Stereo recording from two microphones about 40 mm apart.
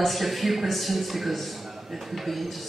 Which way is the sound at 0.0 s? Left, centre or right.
Centre.